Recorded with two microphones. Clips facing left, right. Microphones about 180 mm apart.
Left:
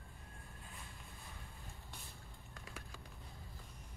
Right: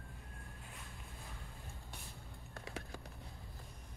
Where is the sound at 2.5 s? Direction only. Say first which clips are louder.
Right 7 dB; 65° right (ahead or behind).